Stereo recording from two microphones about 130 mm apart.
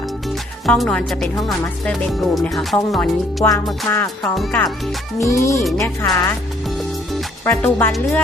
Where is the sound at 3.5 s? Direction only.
25° left (ahead or behind).